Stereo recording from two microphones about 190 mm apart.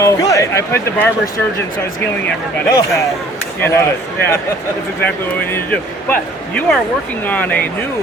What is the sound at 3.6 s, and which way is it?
Speech, 15° left (ahead or behind).